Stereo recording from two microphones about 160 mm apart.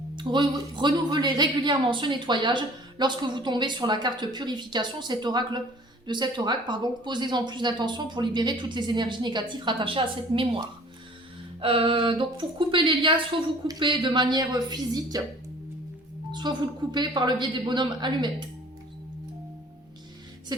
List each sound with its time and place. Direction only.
0.2 s speech: 30° right (ahead or behind)
11.6 s a woman's voice: 35° right (ahead or behind)
16.3 s speech: 25° right (ahead or behind)